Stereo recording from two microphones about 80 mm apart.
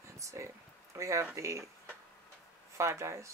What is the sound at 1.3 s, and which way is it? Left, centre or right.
Speech, right.